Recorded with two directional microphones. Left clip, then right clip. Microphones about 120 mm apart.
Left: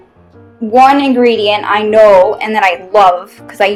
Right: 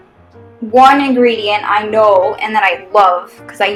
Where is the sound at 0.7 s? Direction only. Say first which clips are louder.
Even; 60° left (ahead or behind).